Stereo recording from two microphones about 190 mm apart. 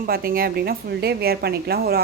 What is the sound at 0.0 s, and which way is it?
A woman's voice, 50° right (ahead or behind).